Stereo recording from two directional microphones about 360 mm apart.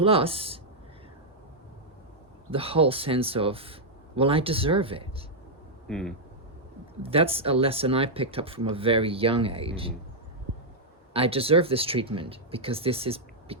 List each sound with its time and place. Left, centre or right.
0.0 s speech: centre
2.5 s speech: centre
5.9 s speech: centre
7.0 s speech: centre
11.1 s speech: centre